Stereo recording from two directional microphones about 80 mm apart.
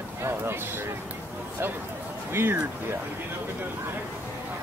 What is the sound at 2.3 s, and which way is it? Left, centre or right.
Speech, right.